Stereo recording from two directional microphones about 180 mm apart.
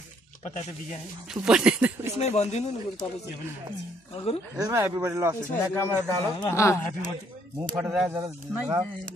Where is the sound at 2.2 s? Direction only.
35° left (ahead or behind).